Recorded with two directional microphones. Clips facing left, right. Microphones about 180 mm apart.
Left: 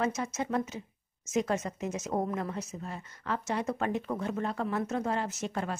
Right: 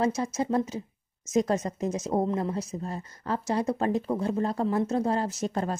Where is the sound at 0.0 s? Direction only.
35° right (ahead or behind).